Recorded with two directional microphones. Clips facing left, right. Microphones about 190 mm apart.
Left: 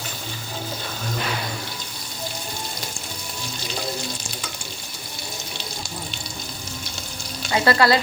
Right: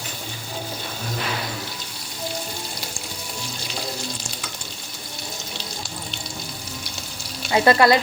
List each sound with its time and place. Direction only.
7.5 s speech: 20° right (ahead or behind)